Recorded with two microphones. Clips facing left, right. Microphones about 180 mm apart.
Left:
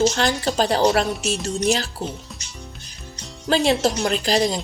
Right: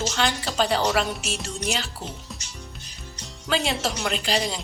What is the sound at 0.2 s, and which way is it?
Speech, 40° left (ahead or behind).